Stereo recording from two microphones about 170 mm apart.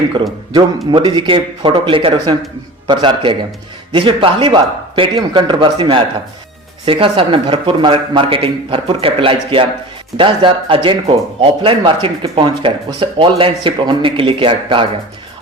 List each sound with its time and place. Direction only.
0.9 s a man's voice: 25° right (ahead or behind)